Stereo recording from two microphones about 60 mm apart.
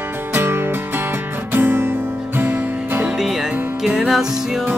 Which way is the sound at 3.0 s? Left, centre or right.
Centre.